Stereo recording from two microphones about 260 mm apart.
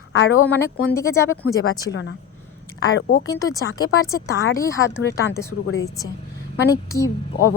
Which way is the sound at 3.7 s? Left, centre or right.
Left.